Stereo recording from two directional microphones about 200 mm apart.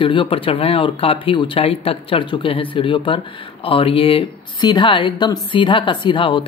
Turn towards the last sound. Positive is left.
turn(degrees=25)  # may be behind; listen again after turning